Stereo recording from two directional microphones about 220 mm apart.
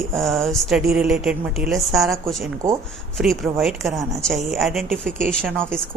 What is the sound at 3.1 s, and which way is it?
A woman's voice, centre (ahead or behind).